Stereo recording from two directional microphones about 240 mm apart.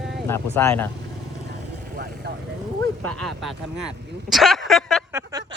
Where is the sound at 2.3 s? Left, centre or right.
Right.